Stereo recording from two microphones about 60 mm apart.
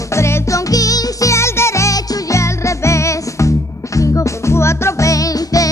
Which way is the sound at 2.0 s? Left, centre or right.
Left.